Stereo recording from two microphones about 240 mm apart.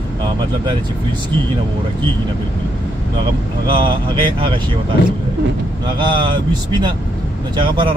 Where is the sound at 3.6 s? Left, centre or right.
Right.